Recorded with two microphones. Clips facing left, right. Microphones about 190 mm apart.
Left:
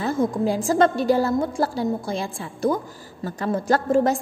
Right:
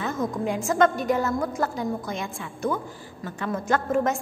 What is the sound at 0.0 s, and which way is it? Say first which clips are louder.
A woman's voice: left 5 dB; 30° left (ahead or behind).